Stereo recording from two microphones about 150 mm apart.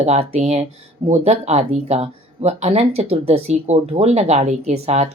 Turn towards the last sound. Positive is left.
turn(degrees=-45)  # may be behind; listen again after turning